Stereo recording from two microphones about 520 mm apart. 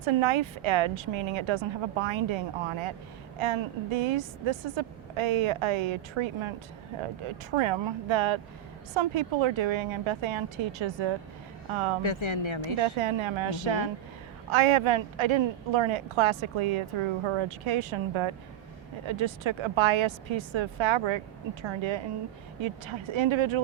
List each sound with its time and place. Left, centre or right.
0.0 s a woman's voice: right
7.5 s a woman's voice: right
12.0 s speech: left
12.8 s a woman's voice: right